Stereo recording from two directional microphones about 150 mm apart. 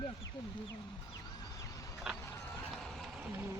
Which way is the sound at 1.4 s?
20° left (ahead or behind).